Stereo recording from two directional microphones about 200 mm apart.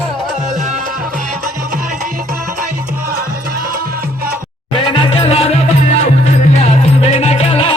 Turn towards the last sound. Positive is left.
turn(degrees=30)  # may be behind; listen again after turning